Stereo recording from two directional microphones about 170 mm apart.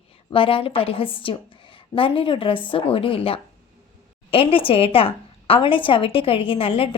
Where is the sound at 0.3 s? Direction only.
30° left (ahead or behind).